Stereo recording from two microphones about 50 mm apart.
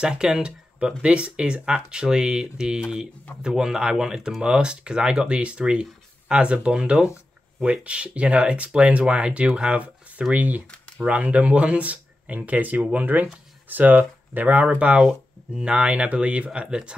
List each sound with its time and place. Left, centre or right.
0.0 s speech: centre
10.3 s speech: right; by 16.9 s centre